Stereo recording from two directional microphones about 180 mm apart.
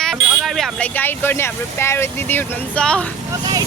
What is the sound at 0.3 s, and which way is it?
Speech, centre (ahead or behind).